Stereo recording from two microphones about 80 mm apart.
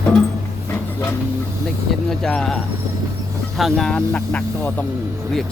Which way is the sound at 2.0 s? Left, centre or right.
Centre.